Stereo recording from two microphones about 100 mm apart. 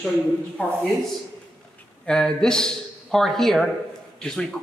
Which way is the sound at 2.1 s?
5° left (ahead or behind).